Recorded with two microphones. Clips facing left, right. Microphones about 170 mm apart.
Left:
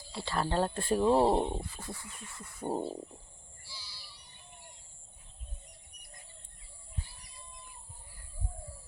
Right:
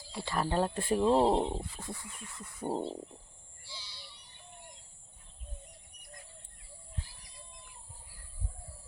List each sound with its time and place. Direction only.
0.1 s speech: 15° right (ahead or behind)
1.0 s speech: 5° left (ahead or behind)
1.7 s a sound: 20° right (ahead or behind)
2.6 s speech: 5° left (ahead or behind)
3.7 s child singing: 10° left (ahead or behind)